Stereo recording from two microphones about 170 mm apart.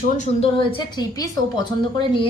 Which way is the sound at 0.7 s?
25° left (ahead or behind).